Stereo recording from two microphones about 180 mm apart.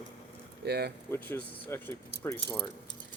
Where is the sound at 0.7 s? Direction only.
60° right (ahead or behind).